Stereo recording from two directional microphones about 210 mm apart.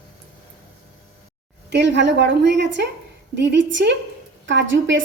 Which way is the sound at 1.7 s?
55° right (ahead or behind).